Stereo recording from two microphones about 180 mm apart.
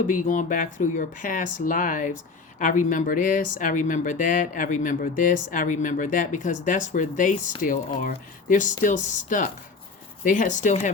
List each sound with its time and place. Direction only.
0.1 s speech: 45° left (ahead or behind)